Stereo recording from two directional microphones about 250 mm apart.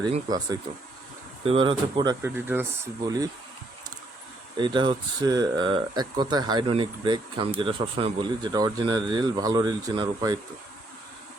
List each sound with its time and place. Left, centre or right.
0.0 s speech: centre
4.5 s speech: centre